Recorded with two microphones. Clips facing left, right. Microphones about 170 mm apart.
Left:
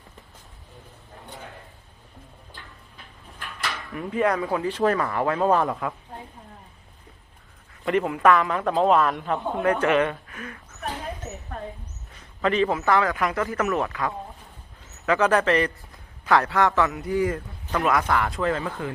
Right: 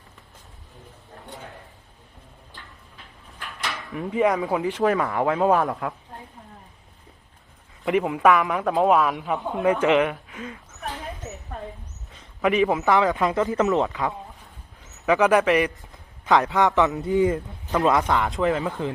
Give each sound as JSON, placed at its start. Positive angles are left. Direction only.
{"t": 3.7, "sound": "a sound", "side_deg": 0}
{"t": 4.1, "sound": "a man's voice", "side_deg": -15}
{"t": 7.9, "sound": "a man's voice", "side_deg": -15}
{"t": 8.6, "sound": "a man's voice", "side_deg": 0}
{"t": 10.7, "sound": "a sound", "side_deg": 0}
{"t": 12.4, "sound": "a man's voice", "side_deg": -15}